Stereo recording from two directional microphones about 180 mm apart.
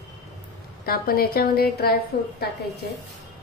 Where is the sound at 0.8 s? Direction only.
55° left (ahead or behind).